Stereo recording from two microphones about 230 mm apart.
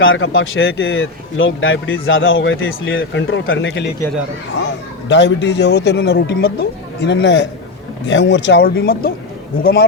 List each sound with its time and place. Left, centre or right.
0.0 s a man's voice: left